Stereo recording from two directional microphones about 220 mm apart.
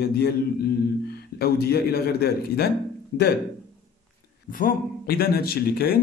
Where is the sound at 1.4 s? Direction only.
45° left (ahead or behind).